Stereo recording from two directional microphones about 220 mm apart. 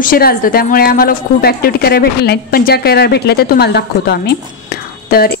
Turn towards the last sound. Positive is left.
turn(degrees=45)  # may be behind; listen again after turning